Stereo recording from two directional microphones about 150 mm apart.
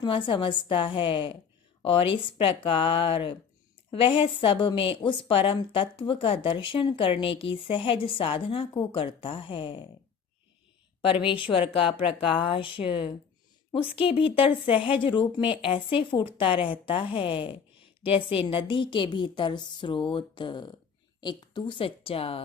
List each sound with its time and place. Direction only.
0.0 s a woman's voice: 35° left (ahead or behind)
11.0 s a woman's voice: 35° left (ahead or behind)